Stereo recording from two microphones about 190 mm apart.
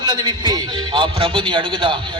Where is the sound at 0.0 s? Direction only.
25° right (ahead or behind).